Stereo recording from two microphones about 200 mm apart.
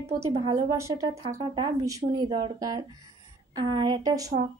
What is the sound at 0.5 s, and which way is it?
A woman's voice, 15° right (ahead or behind).